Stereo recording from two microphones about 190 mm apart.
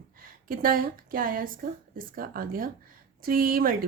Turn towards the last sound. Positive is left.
turn(degrees=-50)  # may be behind; listen again after turning